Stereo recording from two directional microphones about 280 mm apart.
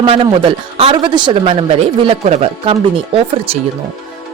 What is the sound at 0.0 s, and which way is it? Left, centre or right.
A woman's voice, centre.